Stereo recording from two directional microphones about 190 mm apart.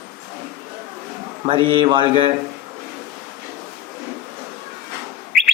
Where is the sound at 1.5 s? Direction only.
25° right (ahead or behind).